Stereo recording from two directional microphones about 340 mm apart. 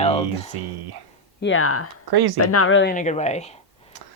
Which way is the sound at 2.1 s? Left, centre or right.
Right.